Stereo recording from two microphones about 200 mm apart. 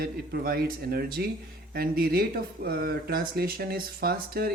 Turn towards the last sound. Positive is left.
turn(degrees=-50)  # may be behind; listen again after turning